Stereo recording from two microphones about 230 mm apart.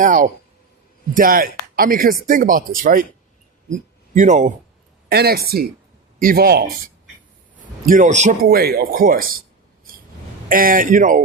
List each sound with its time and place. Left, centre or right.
0.0 s a man's voice: right
10.5 s a man's voice: right